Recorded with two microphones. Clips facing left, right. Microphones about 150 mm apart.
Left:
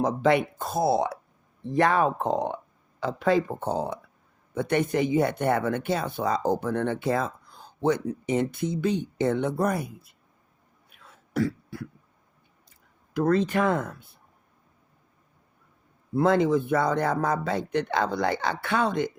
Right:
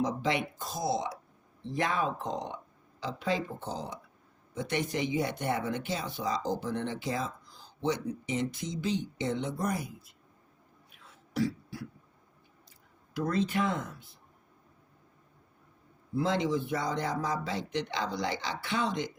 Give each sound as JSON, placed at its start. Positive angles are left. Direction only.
{"t": 0.0, "sound": "speech", "side_deg": 55}
{"t": 10.9, "sound": "throat clearing", "side_deg": 55}
{"t": 13.1, "sound": "speech", "side_deg": 60}
{"t": 16.1, "sound": "speech", "side_deg": 55}